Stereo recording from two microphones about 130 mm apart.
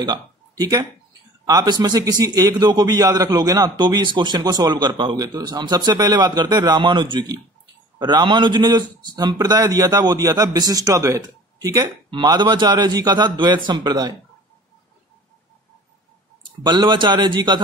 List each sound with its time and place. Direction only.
0.0 s a man's voice: 30° right (ahead or behind)
16.6 s a man's voice: 35° right (ahead or behind)